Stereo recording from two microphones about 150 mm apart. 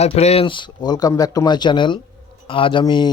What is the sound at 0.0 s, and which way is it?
Speech, 45° left (ahead or behind).